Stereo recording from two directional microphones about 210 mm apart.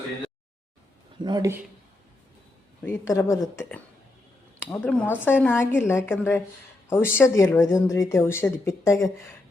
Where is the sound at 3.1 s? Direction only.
15° left (ahead or behind).